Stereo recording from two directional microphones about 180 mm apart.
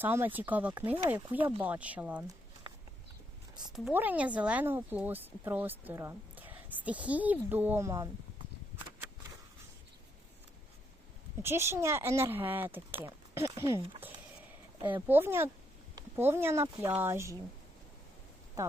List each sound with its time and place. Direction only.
0.0 s speech: 10° right (ahead or behind)
3.7 s speech: 5° right (ahead or behind)
11.4 s speech: 15° right (ahead or behind)
14.0 s a sound: 10° right (ahead or behind)
15.0 s speech: 10° right (ahead or behind)
18.6 s a sound: 20° right (ahead or behind)